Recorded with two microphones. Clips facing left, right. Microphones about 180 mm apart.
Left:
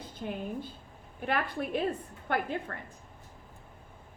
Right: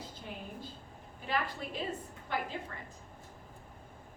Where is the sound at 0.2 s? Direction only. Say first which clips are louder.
Left 11 dB; 60° left (ahead or behind).